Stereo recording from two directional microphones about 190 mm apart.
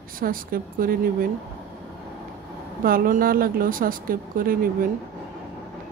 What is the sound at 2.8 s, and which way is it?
Speech, 45° right (ahead or behind).